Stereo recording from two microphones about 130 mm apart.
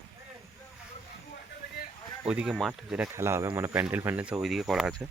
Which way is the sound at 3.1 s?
20° right (ahead or behind).